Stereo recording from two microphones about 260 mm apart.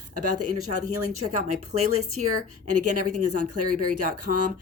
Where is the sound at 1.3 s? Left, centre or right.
Right.